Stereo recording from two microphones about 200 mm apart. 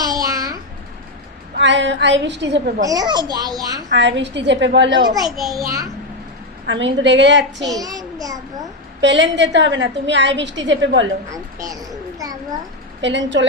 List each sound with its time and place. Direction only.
0.0 s babbling: 20° right (ahead or behind)
1.5 s a woman's voice: 65° right (ahead or behind)
2.8 s a child's voice: 20° right (ahead or behind)
3.9 s a woman's voice: 60° right (ahead or behind)
4.9 s a child's voice: 20° right (ahead or behind)
5.2 s a child's voice: centre (ahead or behind)
6.7 s a woman's voice: 65° right (ahead or behind)
7.7 s a child's voice: 20° right (ahead or behind)
9.0 s a woman's voice: 65° right (ahead or behind)
13.0 s a woman's voice: 65° right (ahead or behind)